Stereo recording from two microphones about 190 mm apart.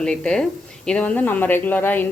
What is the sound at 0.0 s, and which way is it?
Speech, 5° left (ahead or behind).